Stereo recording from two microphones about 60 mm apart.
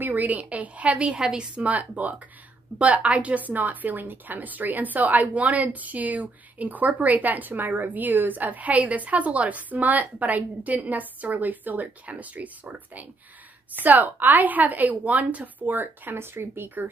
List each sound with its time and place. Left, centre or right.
0.0 s a woman's voice: right
1.7 s a woman's voice: right